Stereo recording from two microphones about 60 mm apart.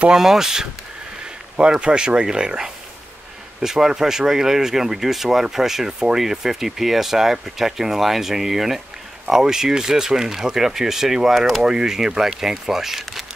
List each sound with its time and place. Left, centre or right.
0.2 s speech: centre